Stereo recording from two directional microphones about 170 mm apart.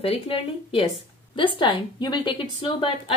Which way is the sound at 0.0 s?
35° left (ahead or behind).